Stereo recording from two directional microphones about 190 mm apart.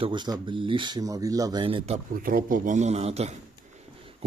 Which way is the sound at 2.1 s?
50° right (ahead or behind).